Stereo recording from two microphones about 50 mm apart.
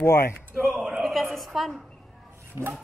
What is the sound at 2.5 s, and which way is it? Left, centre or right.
Filing, right.